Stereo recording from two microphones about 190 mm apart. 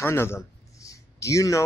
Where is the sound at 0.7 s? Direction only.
15° left (ahead or behind).